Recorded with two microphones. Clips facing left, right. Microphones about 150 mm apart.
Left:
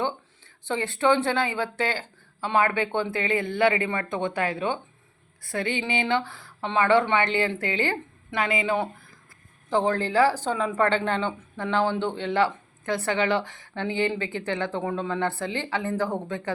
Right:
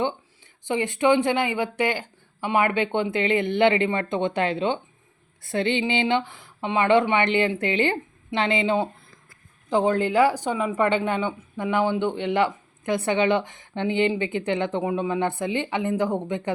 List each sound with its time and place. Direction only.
0.6 s speech: 15° right (ahead or behind)